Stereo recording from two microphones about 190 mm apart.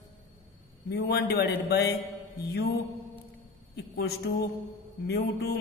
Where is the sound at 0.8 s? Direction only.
60° left (ahead or behind).